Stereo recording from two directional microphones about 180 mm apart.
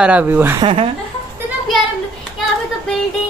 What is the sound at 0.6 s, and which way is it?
Speech, 30° right (ahead or behind).